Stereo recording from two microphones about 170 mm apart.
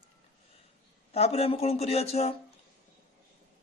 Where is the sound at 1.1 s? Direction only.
40° left (ahead or behind).